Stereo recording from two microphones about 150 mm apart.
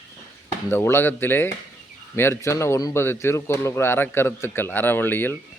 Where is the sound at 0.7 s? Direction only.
15° left (ahead or behind).